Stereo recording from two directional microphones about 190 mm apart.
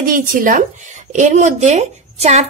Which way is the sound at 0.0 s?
45° right (ahead or behind).